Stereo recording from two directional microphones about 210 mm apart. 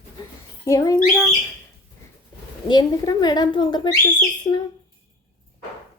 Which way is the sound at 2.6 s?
20° left (ahead or behind).